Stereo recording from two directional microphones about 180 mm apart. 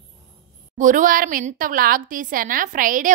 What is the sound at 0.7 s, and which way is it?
A woman's voice, 45° right (ahead or behind).